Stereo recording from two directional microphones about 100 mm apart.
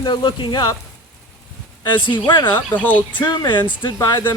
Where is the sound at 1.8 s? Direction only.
50° left (ahead or behind).